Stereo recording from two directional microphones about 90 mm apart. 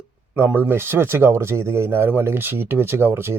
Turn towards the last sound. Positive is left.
turn(degrees=-25)  # may be behind; listen again after turning